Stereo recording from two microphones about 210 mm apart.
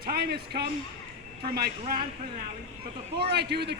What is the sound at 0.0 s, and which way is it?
Speech, 45° right (ahead or behind).